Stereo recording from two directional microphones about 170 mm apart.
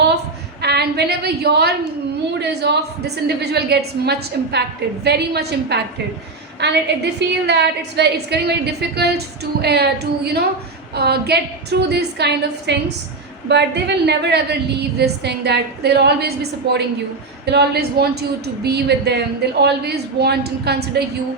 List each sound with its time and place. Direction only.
0.6 s a woman's voice: 75° right (ahead or behind)
13.5 s a woman's voice: 90° right